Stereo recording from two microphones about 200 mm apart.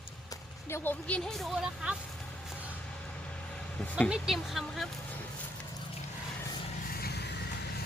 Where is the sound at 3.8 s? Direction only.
5° left (ahead or behind).